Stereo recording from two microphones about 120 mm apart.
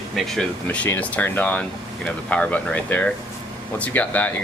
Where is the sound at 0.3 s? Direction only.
5° left (ahead or behind).